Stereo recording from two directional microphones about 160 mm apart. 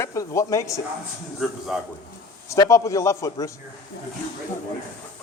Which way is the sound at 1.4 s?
5° right (ahead or behind).